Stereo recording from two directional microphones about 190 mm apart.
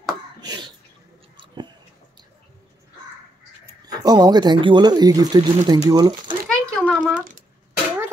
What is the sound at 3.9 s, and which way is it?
Speech, 20° right (ahead or behind).